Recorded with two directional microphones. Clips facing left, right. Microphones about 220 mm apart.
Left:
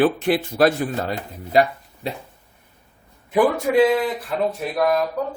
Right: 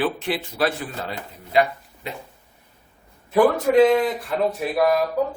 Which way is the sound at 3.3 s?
10° left (ahead or behind).